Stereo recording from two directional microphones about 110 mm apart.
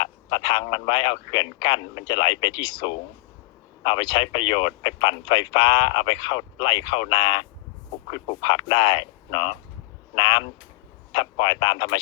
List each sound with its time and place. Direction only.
0.0 s speech: 45° left (ahead or behind)